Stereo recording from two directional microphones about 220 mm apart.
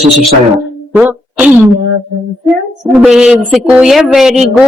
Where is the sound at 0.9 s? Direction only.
10° right (ahead or behind).